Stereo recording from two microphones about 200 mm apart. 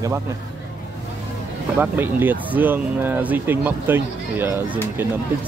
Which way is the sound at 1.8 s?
10° right (ahead or behind).